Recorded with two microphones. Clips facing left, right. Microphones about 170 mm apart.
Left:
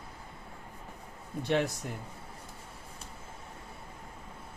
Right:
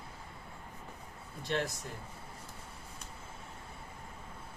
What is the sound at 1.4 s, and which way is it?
Speech, 60° left (ahead or behind).